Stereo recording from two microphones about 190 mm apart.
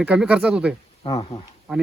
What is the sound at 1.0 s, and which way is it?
Speech, 25° left (ahead or behind).